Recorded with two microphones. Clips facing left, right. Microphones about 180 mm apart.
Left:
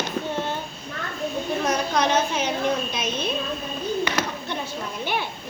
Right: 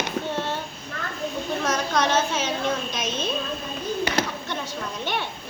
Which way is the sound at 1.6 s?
15° left (ahead or behind).